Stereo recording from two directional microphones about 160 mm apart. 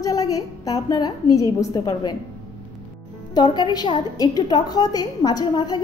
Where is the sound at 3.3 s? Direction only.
25° left (ahead or behind).